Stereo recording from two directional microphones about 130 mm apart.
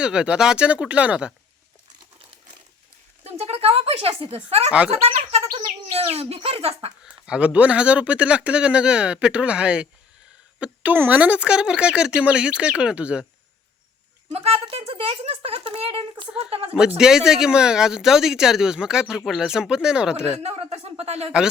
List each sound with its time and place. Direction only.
0.0 s speech: 5° right (ahead or behind)
3.2 s speech: 50° right (ahead or behind)
7.0 s speech: 5° right (ahead or behind)
14.3 s speech: 50° right (ahead or behind)
17.0 s speech: 5° right (ahead or behind)
20.4 s speech: 55° right (ahead or behind)